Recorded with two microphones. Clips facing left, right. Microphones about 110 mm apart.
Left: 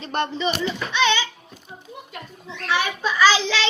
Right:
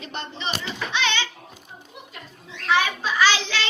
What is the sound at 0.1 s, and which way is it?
Speech, 45° left (ahead or behind).